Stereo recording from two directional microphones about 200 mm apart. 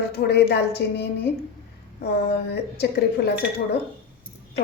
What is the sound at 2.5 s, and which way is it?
A woman's voice, 55° left (ahead or behind).